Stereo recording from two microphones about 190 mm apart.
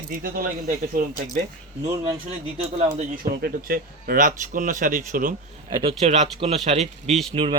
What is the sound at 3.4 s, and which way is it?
Speech, 50° right (ahead or behind).